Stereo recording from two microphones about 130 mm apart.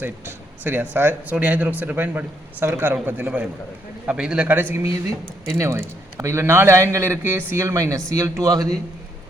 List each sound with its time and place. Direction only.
0.0 s speech: 15° right (ahead or behind)